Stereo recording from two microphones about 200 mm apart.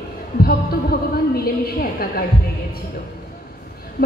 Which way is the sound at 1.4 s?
50° left (ahead or behind).